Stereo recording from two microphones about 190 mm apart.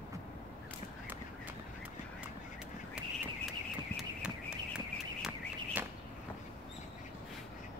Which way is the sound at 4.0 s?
5° right (ahead or behind).